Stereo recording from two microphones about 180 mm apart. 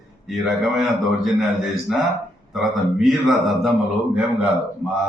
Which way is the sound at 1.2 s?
Centre (ahead or behind).